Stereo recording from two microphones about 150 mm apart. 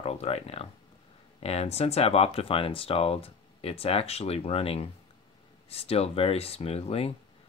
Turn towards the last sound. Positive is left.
turn(degrees=40)  # may be behind; listen again after turning